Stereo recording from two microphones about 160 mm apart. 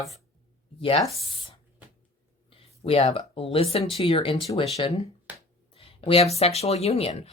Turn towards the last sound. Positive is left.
turn(degrees=40)  # may be behind; listen again after turning